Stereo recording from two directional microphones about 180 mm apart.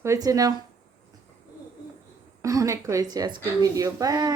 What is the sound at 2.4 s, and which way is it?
A woman's voice, 20° right (ahead or behind).